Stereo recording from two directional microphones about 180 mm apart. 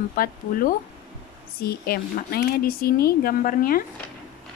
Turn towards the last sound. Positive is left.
turn(degrees=50)  # may be behind; listen again after turning